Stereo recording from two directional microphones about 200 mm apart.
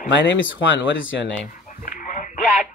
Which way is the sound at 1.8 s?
45° left (ahead or behind).